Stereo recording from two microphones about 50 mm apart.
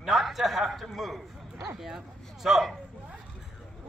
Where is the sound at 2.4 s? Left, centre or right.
Centre.